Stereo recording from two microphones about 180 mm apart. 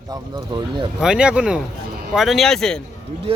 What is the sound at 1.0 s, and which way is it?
Speech, 5° right (ahead or behind).